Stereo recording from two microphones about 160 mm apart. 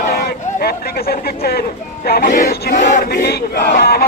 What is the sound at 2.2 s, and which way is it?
Speech, 65° left (ahead or behind).